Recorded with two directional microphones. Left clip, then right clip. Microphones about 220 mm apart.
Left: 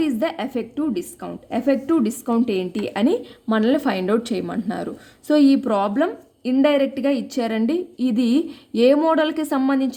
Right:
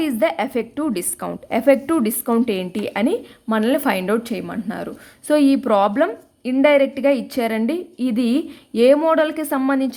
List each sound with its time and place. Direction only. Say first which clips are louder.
0.0 s a woman's voice: right 3 dB; 20° right (ahead or behind)